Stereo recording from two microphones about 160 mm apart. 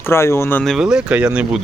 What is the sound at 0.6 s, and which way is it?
Speech, centre (ahead or behind).